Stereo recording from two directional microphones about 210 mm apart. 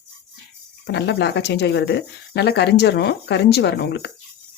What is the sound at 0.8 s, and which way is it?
Speech, 55° left (ahead or behind).